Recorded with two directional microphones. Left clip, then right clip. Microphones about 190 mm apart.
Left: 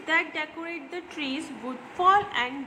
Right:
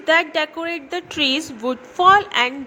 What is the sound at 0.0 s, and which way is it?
A woman's voice, 35° right (ahead or behind).